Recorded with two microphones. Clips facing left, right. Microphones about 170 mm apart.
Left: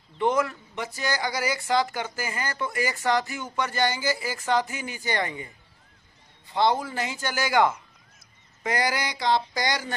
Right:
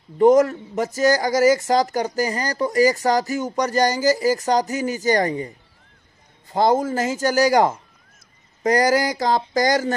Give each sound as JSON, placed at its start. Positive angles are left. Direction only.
{"t": 0.2, "sound": "speech", "side_deg": -40}
{"t": 6.5, "sound": "speech", "side_deg": -45}
{"t": 8.6, "sound": "a sound", "side_deg": -40}